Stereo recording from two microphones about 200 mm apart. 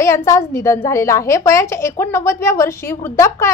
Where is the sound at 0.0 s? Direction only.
15° left (ahead or behind).